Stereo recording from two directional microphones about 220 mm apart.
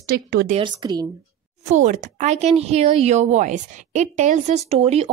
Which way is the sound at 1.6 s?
35° right (ahead or behind).